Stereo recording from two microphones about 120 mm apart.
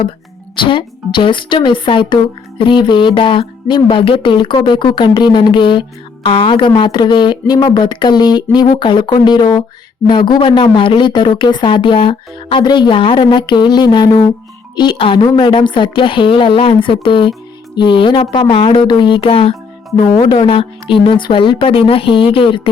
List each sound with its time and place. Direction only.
0.5 s a woman's voice: 40° left (ahead or behind)